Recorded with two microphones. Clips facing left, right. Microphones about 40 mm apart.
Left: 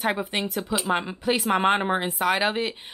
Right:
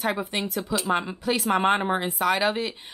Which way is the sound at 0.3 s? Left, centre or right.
Centre.